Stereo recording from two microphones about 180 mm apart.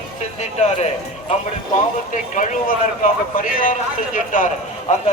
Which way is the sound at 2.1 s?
45° left (ahead or behind).